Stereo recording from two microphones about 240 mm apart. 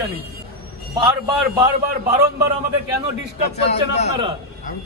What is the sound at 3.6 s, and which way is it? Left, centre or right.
Speech, left.